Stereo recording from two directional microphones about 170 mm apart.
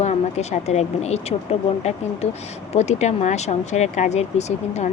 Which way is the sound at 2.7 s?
40° left (ahead or behind).